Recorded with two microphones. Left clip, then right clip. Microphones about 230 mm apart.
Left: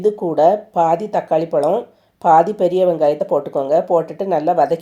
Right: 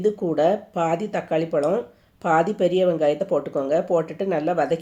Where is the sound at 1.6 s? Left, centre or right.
Left.